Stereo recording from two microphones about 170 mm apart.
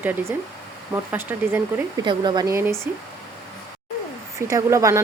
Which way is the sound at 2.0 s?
25° right (ahead or behind).